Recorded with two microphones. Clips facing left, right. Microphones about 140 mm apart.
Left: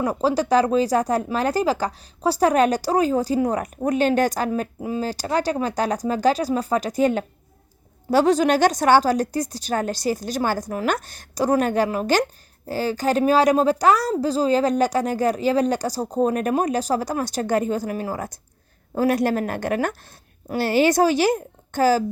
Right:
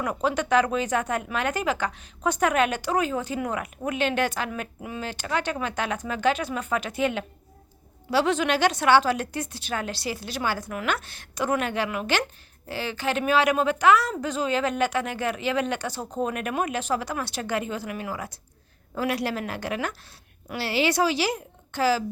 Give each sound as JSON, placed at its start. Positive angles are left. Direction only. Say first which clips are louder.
{"t": 0.0, "sound": "a woman's voice", "louder": "left 5 dB", "side_deg": 30}